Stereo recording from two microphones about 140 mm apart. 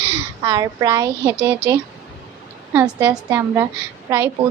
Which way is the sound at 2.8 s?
10° right (ahead or behind).